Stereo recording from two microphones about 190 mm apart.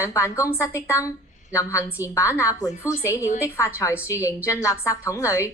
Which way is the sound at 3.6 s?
15° left (ahead or behind).